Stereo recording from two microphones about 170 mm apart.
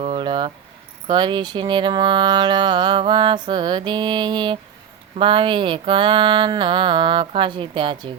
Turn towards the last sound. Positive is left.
turn(degrees=-30)  # may be behind; listen again after turning